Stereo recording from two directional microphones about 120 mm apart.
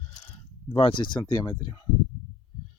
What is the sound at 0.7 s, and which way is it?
Speech, 50° left (ahead or behind).